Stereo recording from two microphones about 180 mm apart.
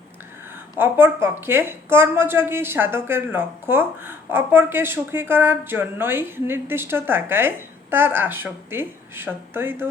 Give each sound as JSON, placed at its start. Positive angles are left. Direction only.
{"t": 0.8, "sound": "speech", "side_deg": -10}